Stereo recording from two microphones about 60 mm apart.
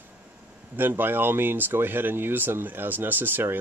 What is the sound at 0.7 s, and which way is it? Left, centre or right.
Speech, right.